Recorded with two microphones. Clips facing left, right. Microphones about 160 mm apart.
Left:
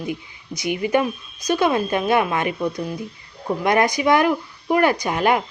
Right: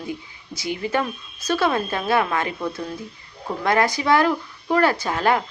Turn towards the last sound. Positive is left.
turn(degrees=15)  # may be behind; listen again after turning